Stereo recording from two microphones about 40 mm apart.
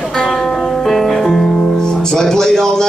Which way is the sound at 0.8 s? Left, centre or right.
Centre.